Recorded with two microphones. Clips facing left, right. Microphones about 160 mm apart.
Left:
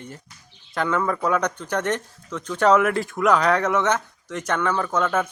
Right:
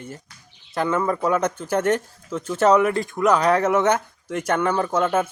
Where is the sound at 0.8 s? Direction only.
10° right (ahead or behind).